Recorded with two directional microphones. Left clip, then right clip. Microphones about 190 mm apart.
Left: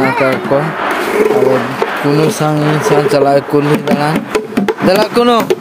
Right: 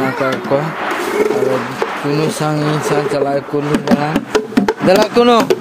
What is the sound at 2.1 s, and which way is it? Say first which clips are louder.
Speech: left 5 dB; centre (ahead or behind).